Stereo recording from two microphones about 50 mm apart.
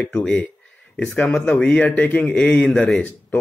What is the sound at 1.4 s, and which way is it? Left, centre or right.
Speech, left.